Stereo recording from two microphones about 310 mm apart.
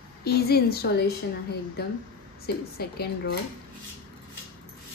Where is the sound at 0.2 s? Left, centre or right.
Left.